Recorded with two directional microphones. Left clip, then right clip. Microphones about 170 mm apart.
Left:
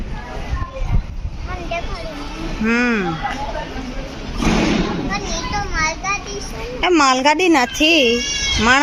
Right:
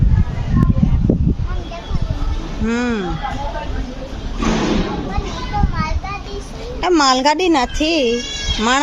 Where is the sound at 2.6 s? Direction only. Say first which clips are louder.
Left 3 dB; 5° right (ahead or behind).